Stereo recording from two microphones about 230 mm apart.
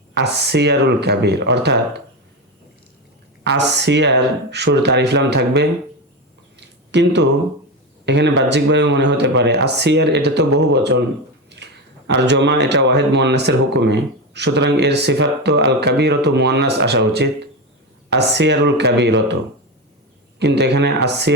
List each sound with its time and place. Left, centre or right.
0.1 s speech: right
3.4 s speech: right
6.6 s a sound: right
8.0 s speech: right
20.4 s speech: right